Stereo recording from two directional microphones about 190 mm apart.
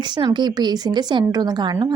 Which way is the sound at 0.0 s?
25° right (ahead or behind).